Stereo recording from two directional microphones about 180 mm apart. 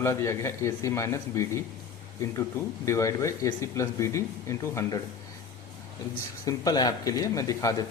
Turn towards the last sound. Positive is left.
turn(degrees=20)  # may be behind; listen again after turning